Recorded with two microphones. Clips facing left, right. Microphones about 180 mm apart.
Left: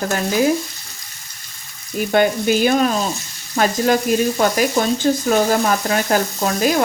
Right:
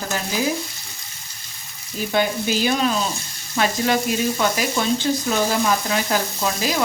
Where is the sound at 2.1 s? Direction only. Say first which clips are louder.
Left 5 dB; 55° left (ahead or behind).